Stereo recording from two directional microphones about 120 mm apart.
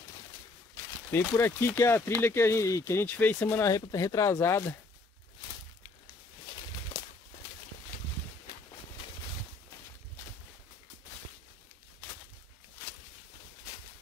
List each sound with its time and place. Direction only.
1.1 s speech: 20° left (ahead or behind)